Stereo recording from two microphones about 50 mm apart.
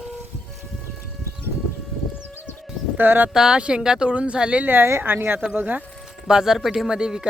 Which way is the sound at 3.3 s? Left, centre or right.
Centre.